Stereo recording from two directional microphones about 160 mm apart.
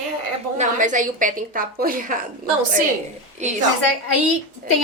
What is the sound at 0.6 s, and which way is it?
A woman's voice, 50° right (ahead or behind).